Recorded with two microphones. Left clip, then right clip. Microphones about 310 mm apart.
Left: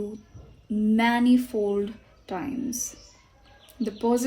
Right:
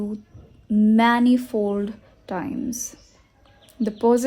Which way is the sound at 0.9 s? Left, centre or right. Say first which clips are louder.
Right 3 dB; right.